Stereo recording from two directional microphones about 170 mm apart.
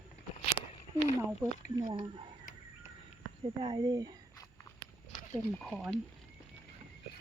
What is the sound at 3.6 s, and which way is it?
Speech, 25° right (ahead or behind).